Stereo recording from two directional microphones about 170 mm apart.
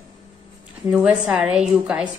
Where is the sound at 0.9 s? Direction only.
10° right (ahead or behind).